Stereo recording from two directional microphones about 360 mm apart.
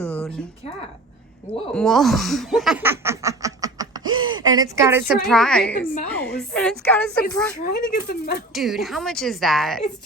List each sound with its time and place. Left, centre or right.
1.7 s a woman's voice: centre
7.6 s speech: left
8.5 s a woman's voice: centre